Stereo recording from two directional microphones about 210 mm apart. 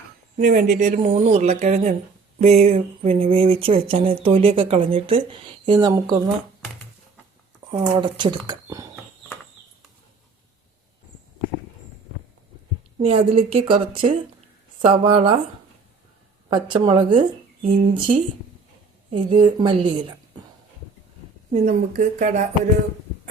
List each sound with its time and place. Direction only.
0.3 s speech: 40° right (ahead or behind); by 6.3 s 15° right (ahead or behind)
7.7 s speech: 20° right (ahead or behind)
13.0 s speech: 25° right (ahead or behind)
16.5 s speech: 25° right (ahead or behind)
21.5 s speech: 35° right (ahead or behind)